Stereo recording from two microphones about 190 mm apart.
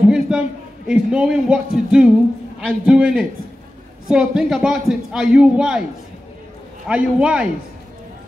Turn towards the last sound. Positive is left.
turn(degrees=-5)  # may be behind; listen again after turning